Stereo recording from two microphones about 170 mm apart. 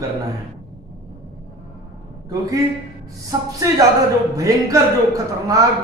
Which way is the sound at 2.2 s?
20° right (ahead or behind).